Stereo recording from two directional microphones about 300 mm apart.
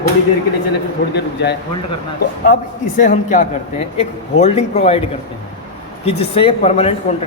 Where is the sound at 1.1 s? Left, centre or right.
Left.